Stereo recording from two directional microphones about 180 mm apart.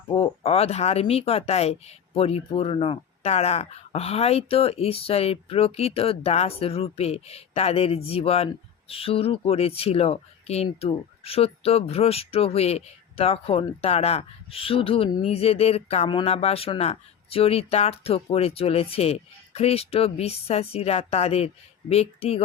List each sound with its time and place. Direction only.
0.1 s speech: 35° left (ahead or behind)